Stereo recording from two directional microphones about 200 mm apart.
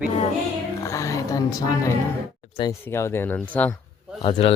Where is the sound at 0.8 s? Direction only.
15° left (ahead or behind).